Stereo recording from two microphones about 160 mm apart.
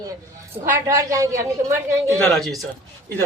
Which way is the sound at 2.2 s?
Centre (ahead or behind).